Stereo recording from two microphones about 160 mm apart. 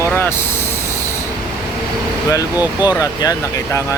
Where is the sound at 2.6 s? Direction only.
10° right (ahead or behind).